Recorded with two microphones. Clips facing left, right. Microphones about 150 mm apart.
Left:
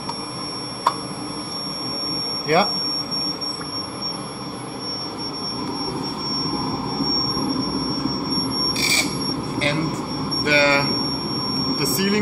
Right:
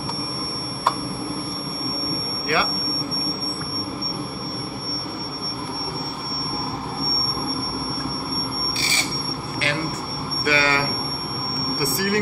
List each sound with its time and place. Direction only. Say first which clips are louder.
2.4 s speech: left 6 dB; 45° left (ahead or behind)
10.4 s vehicle: left 3 dB; 25° left (ahead or behind)